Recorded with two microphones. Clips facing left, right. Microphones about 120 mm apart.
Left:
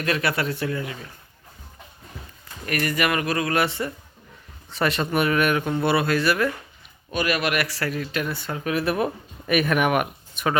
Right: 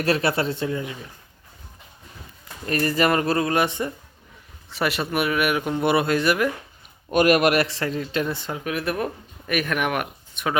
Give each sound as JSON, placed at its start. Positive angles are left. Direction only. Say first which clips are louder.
{"t": 0.0, "sound": "speech", "louder": "right 3 dB", "side_deg": -30}
{"t": 2.6, "sound": "speech", "louder": "right 3 dB", "side_deg": -30}
{"t": 4.7, "sound": "speech", "louder": "left 1 dB", "side_deg": -5}
{"t": 7.1, "sound": "speech", "louder": "right 7 dB", "side_deg": -50}
{"t": 7.6, "sound": "speech", "louder": "right 2 dB", "side_deg": -25}
{"t": 8.6, "sound": "speech", "louder": "left 3 dB", "side_deg": 0}